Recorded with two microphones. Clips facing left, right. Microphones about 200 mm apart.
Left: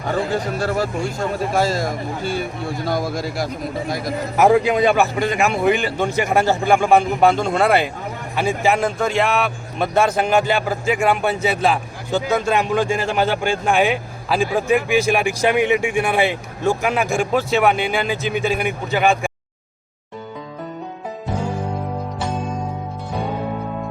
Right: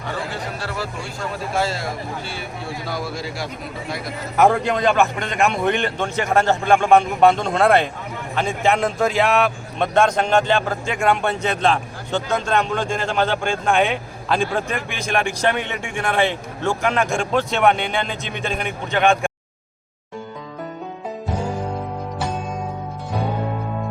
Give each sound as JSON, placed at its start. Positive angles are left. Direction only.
{"t": 0.0, "sound": "speech", "side_deg": 45}
{"t": 4.4, "sound": "speech", "side_deg": 5}